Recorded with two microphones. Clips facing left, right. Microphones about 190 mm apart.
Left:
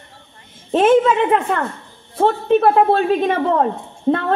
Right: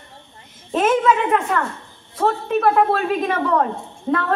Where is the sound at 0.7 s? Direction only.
30° left (ahead or behind).